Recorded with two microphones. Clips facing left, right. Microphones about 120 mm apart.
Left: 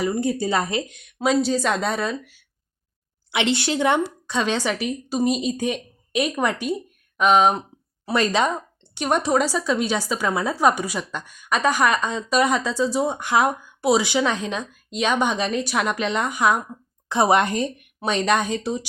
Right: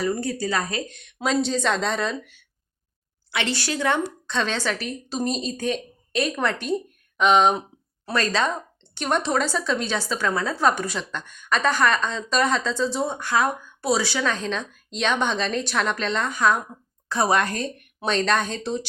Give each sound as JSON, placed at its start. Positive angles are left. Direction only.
{"t": 0.0, "sound": "a woman's voice", "side_deg": 15}
{"t": 3.3, "sound": "a woman's voice", "side_deg": 20}
{"t": 8.0, "sound": "a woman's voice", "side_deg": 15}